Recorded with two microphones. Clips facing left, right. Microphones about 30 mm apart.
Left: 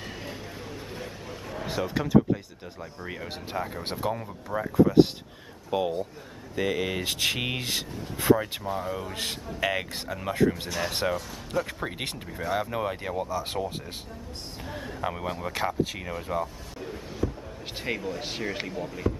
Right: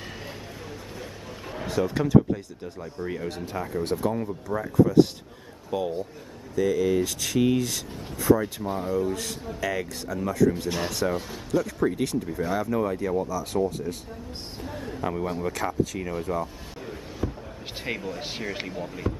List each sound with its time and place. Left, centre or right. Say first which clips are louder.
1.8 s speech: right 2 dB; centre
3.5 s speech: right 3 dB; left
6.5 s speech: right 5 dB; left
8.7 s speech: left 1 dB; centre
9.1 s speech: right 1 dB; left
12.3 s speech: right 3 dB; centre
12.5 s speech: right 2 dB; left
14.6 s speech: right 1 dB; centre
16.8 s a sound: left 1 dB; centre
17.8 s speech: even; centre